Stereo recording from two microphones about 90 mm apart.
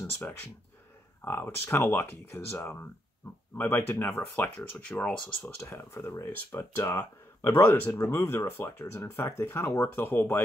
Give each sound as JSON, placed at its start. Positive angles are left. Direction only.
{"t": 0.0, "sound": "speech", "side_deg": 25}
{"t": 5.6, "sound": "speech", "side_deg": 30}